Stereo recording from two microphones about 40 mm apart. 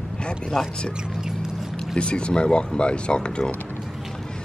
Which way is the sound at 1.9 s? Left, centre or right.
Left.